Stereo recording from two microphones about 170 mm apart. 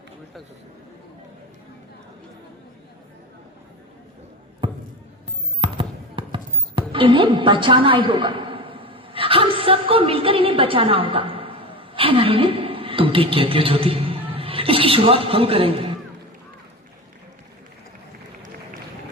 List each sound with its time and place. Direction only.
4.6 s basketball bounce: 25° right (ahead or behind)